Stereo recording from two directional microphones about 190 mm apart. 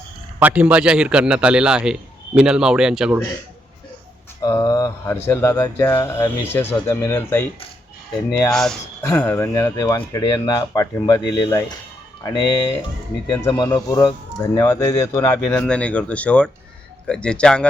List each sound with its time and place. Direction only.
0.3 s a man's voice: 5° right (ahead or behind)
4.4 s speech: 20° left (ahead or behind)
8.4 s a man's voice: 5° left (ahead or behind)